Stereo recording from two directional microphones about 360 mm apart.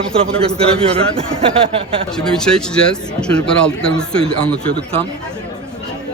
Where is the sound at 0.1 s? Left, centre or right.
Centre.